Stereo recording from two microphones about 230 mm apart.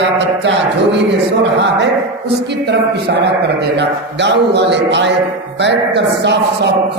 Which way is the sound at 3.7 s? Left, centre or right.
Right.